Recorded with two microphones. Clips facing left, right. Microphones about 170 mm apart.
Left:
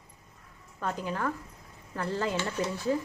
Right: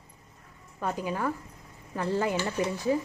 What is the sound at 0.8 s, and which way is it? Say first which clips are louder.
Speech: right 2 dB; 10° right (ahead or behind).